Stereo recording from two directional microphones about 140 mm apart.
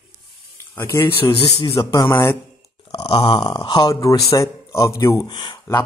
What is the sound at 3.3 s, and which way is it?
Speech, 35° left (ahead or behind).